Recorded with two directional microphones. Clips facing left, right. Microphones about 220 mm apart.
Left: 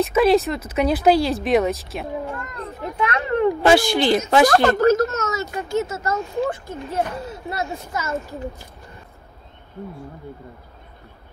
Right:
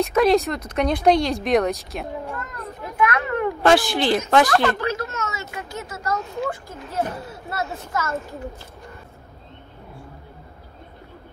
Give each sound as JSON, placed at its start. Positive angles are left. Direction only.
{"t": 0.0, "sound": "speech", "side_deg": 0}
{"t": 3.0, "sound": "a sound", "side_deg": 25}
{"t": 3.6, "sound": "speech", "side_deg": 0}
{"t": 4.5, "sound": "speech", "side_deg": 40}